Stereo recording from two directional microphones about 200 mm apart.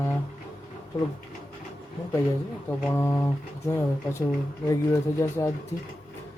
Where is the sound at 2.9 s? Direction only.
10° left (ahead or behind).